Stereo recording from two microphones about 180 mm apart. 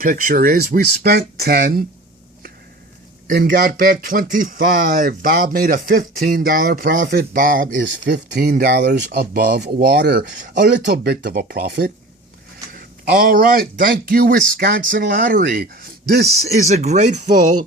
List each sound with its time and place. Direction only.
0.0 s speech: 50° right (ahead or behind)
3.2 s speech: 55° right (ahead or behind); by 8.4 s 70° right (ahead or behind)
8.4 s speech: 55° right (ahead or behind)
10.6 s speech: 70° right (ahead or behind)
16.6 s speech: 40° right (ahead or behind)